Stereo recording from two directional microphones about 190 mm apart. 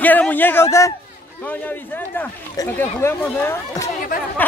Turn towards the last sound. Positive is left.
turn(degrees=15)  # may be behind; listen again after turning